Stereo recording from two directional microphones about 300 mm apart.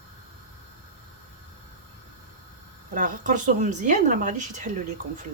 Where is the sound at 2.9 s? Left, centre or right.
Right.